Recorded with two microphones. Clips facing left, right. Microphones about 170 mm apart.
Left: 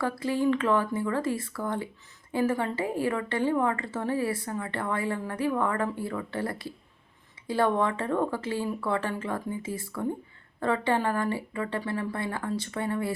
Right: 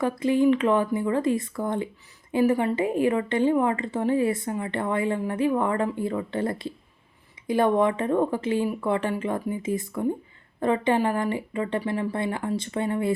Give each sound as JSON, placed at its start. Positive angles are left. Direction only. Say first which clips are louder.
{"t": 0.0, "sound": "a woman's voice", "louder": "right 5 dB", "side_deg": -20}